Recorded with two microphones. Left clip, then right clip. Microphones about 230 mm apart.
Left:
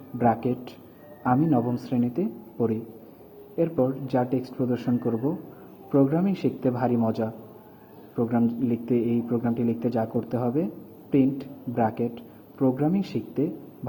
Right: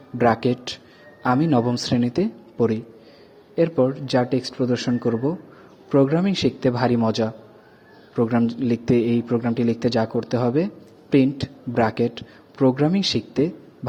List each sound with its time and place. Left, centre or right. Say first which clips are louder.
0.2 s a man's voice: right 5 dB; right
11.7 s a man's voice: right 5 dB; right